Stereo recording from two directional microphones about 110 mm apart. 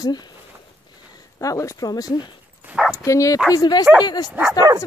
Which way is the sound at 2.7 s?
5° right (ahead or behind).